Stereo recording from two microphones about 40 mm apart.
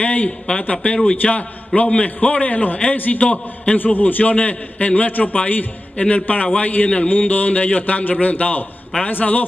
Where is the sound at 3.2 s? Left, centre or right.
Left.